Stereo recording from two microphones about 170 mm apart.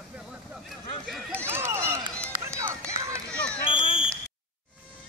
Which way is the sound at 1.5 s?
15° right (ahead or behind).